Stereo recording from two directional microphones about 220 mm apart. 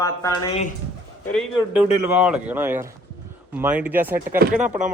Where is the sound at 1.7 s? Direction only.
5° right (ahead or behind).